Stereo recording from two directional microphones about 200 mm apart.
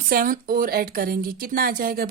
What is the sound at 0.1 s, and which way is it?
Speech, 45° right (ahead or behind).